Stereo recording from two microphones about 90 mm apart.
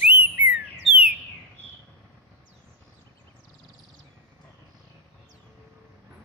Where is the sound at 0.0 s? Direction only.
15° right (ahead or behind).